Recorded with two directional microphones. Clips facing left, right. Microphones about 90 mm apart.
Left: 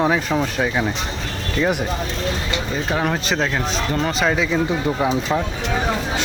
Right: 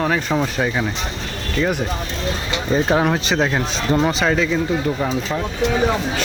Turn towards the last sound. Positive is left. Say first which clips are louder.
# right 2 dB
turn(degrees=0)  # may be behind; listen again after turning